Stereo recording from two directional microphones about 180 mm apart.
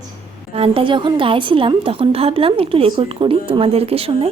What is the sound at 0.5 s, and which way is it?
A woman's voice, 30° right (ahead or behind).